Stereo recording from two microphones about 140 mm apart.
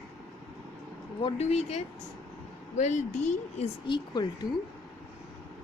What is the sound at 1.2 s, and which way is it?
A woman's voice, 45° left (ahead or behind).